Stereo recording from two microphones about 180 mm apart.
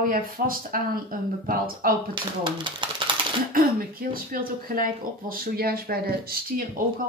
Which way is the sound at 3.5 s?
55° right (ahead or behind).